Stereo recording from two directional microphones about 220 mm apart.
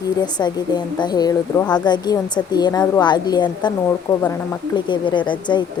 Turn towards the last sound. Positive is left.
turn(degrees=20)  # may be behind; listen again after turning